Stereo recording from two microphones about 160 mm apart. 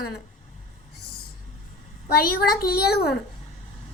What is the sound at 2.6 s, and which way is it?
Speech, 85° left.